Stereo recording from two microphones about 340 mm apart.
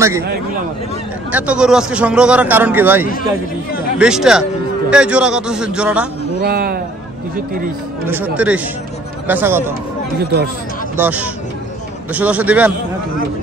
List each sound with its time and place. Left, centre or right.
1.3 s a man's voice: centre
6.4 s speech: right
8.1 s a man's voice: centre
10.1 s speech: right
11.0 s a man's voice: centre